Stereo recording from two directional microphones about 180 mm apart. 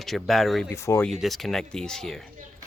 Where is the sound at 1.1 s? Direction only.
Centre (ahead or behind).